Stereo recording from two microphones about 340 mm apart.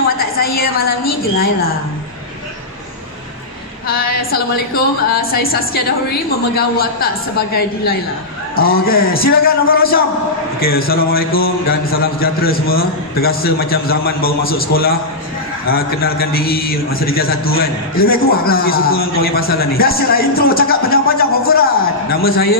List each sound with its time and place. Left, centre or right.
0.2 s a woman's voice: left
3.8 s a man's voice: left